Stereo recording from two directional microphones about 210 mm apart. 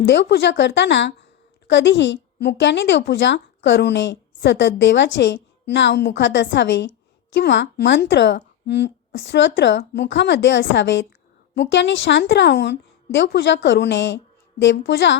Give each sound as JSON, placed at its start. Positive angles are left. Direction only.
{"t": 0.0, "sound": "a woman's voice", "side_deg": 55}